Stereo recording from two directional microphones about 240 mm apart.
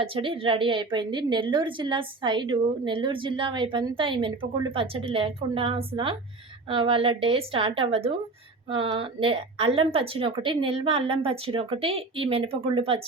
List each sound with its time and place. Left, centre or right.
0.0 s a woman's voice: right